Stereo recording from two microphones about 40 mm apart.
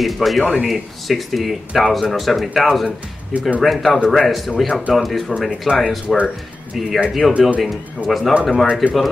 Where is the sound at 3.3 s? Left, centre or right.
Right.